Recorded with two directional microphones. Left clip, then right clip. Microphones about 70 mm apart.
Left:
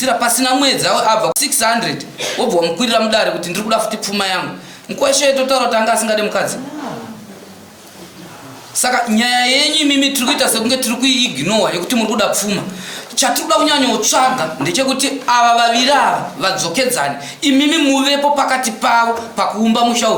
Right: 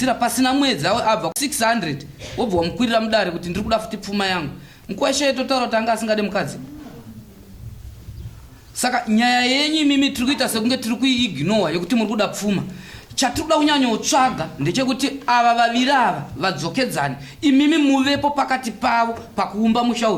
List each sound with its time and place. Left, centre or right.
0.0 s speech: right
8.7 s speech: right